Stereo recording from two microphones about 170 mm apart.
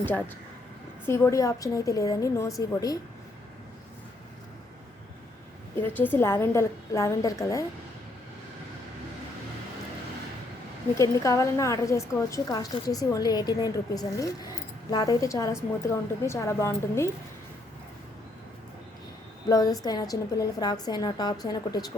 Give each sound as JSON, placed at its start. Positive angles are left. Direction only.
{"t": 1.0, "sound": "a woman's voice", "side_deg": 15}
{"t": 5.8, "sound": "a woman's voice", "side_deg": 10}
{"t": 10.9, "sound": "a woman's voice", "side_deg": 20}
{"t": 19.5, "sound": "a woman's voice", "side_deg": 20}